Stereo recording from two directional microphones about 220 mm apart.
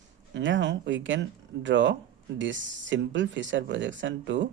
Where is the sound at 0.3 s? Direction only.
55° right (ahead or behind).